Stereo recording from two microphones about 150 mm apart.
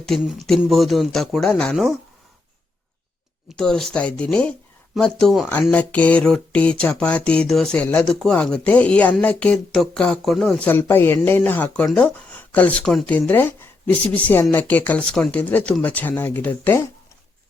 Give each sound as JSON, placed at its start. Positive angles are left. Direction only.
{"t": 0.0, "sound": "speech", "side_deg": 0}
{"t": 3.6, "sound": "speech", "side_deg": 5}
{"t": 10.7, "sound": "speech", "side_deg": 15}